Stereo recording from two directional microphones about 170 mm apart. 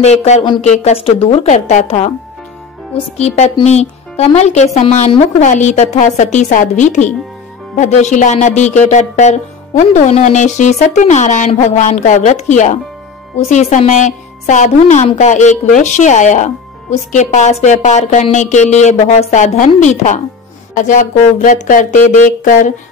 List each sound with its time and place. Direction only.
0.0 s a woman's voice: 40° left (ahead or behind)
0.4 s speech: 25° left (ahead or behind)
0.7 s a woman's voice: 40° left (ahead or behind)